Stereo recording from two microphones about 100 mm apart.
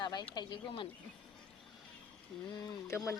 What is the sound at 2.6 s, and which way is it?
Speech, 30° left (ahead or behind).